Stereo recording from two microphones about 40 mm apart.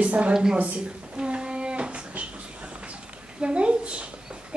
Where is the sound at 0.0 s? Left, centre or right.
Right.